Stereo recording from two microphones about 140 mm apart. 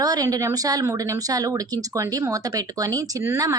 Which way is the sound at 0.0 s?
25° right (ahead or behind).